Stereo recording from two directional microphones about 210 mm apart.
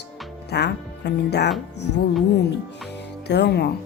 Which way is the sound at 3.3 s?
50° left (ahead or behind).